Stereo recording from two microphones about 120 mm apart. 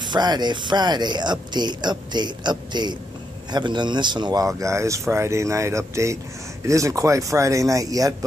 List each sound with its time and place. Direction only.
0.0 s speech: 35° right (ahead or behind)